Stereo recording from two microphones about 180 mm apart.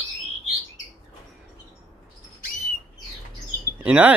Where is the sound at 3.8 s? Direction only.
10° right (ahead or behind).